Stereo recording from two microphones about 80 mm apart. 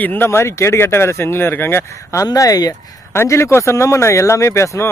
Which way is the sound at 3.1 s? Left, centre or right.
Left.